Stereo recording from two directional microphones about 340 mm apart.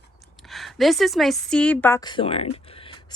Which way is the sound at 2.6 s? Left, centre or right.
Centre.